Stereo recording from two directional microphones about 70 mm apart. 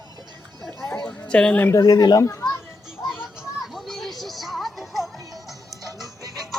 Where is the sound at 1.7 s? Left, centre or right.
Left.